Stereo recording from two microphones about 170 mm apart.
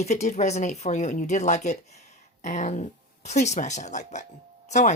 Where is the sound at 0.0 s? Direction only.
40° left (ahead or behind).